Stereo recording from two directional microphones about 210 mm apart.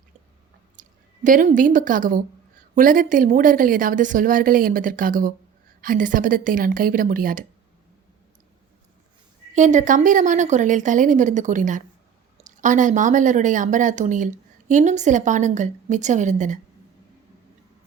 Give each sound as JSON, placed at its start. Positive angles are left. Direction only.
{"t": 0.8, "sound": "speech", "side_deg": -40}
{"t": 9.6, "sound": "speech", "side_deg": -35}